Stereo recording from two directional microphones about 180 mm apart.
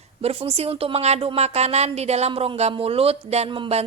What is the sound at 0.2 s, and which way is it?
A woman's voice, 30° right (ahead or behind).